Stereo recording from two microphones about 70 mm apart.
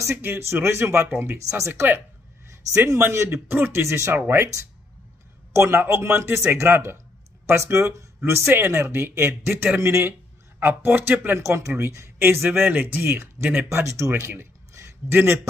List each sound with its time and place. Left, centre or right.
0.1 s speech: right
0.4 s a man's voice: right
1.7 s speech: right
3.0 s a man's voice: right
5.5 s a man's voice: right
9.8 s speech: right
10.6 s a man's voice: right
11.3 s a man's voice: right
14.7 s a sound: right
15.1 s a man's voice: right